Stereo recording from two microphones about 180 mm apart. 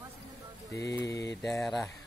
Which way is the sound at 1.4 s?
5° left (ahead or behind).